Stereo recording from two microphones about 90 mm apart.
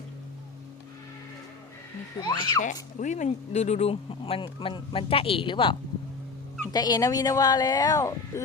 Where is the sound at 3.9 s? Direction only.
90° left; by 5.8 s 65° left (ahead or behind).